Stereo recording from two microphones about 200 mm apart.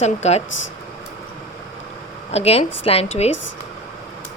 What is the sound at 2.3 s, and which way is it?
Speech, 30° left (ahead or behind).